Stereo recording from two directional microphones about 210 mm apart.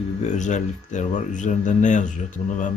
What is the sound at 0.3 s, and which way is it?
Speech, 35° left (ahead or behind).